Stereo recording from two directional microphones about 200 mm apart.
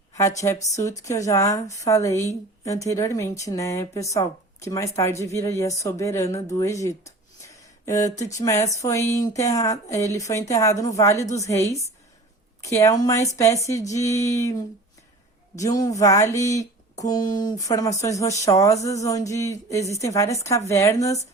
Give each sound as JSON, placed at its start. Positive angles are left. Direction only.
{"t": 0.2, "sound": "speech", "side_deg": 15}
{"t": 15.5, "sound": "speech", "side_deg": 15}